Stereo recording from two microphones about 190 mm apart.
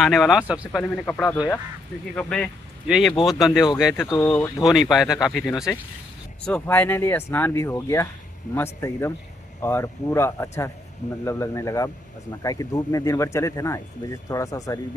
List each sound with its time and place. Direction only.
0.0 s speech: centre (ahead or behind)
0.7 s speech: 5° left (ahead or behind)
4.0 s speech: 15° left (ahead or behind)
4.6 s speech: centre (ahead or behind); by 14.8 s 15° left (ahead or behind)